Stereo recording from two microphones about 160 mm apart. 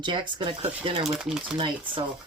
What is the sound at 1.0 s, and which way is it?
Speech, centre (ahead or behind).